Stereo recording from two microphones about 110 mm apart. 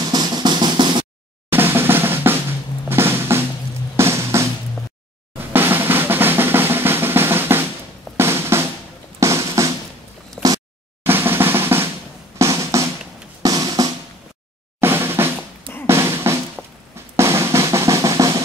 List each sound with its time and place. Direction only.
0.0 s drum: 35° right (ahead or behind)
1.5 s drum: 20° right (ahead or behind)
3.9 s music: 25° right (ahead or behind)
5.5 s drum: 20° right (ahead or behind)
9.2 s music: 30° right (ahead or behind)
10.4 s a sound: centre (ahead or behind)
11.1 s drum roll: 20° right (ahead or behind)
12.4 s drum: 30° right (ahead or behind)
14.8 s drum: 20° right (ahead or behind)
17.2 s drum roll: 25° right (ahead or behind)